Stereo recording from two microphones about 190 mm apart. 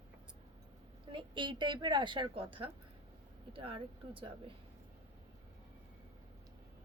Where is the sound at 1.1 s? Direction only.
25° right (ahead or behind).